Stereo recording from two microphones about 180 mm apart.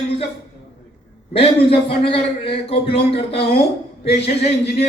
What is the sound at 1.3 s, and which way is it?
A man's voice, 30° left (ahead or behind).